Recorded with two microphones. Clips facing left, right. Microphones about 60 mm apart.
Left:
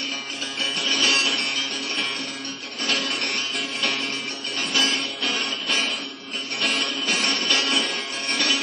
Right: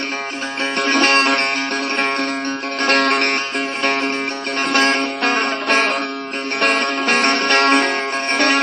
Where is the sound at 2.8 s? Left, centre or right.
Right.